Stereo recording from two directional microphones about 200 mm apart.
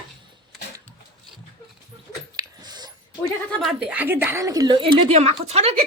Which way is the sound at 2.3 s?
20° right (ahead or behind).